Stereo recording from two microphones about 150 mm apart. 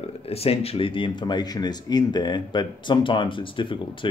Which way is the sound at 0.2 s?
40° left (ahead or behind).